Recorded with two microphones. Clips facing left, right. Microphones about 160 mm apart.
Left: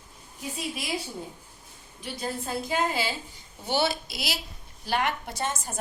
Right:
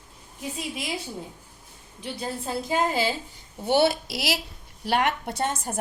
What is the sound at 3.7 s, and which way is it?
Speech, 60° right (ahead or behind).